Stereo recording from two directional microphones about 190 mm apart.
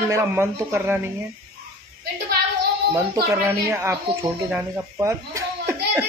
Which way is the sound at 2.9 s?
15° right (ahead or behind).